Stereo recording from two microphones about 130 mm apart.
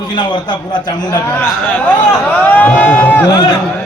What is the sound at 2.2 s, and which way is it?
Speech, 15° left (ahead or behind).